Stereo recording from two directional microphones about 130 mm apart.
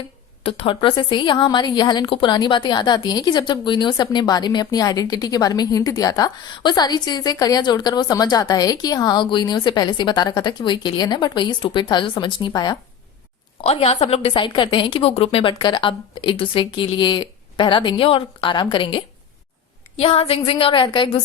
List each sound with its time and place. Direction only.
0.4 s a woman's voice: 45° left (ahead or behind)
13.6 s a woman's voice: 50° left (ahead or behind)